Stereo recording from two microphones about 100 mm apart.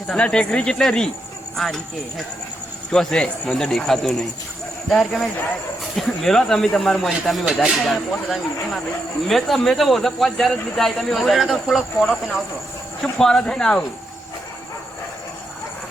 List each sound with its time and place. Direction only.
0.1 s speech: 10° left (ahead or behind)